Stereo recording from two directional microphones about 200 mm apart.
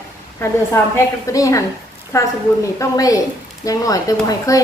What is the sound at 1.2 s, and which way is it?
A woman's voice, 15° left (ahead or behind).